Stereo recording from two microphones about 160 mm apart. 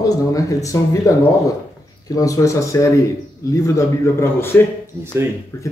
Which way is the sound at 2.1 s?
20° left (ahead or behind).